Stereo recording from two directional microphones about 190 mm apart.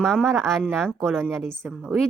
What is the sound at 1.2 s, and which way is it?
Speech, 10° right (ahead or behind).